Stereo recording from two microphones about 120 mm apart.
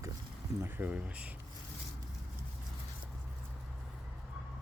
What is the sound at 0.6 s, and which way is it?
Speech, 15° right (ahead or behind).